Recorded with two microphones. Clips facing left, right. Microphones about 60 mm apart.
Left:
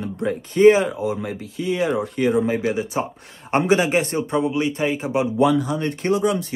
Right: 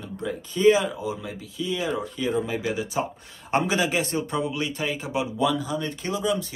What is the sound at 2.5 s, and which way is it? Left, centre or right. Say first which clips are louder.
Speech: left 6 dB; left.